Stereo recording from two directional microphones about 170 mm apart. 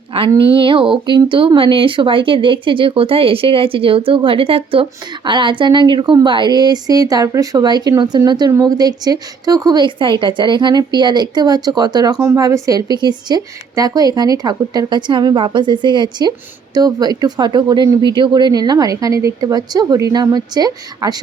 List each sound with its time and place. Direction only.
0.1 s speech: 35° right (ahead or behind)